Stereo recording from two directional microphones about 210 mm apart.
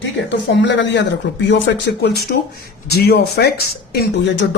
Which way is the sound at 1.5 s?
50° left (ahead or behind).